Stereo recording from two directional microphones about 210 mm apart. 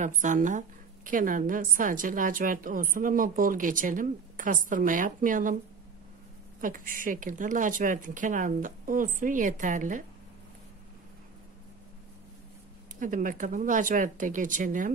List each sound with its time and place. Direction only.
0.0 s a woman's voice: 35° right (ahead or behind)
6.6 s a woman's voice: 40° right (ahead or behind)
13.0 s a woman's voice: 40° right (ahead or behind)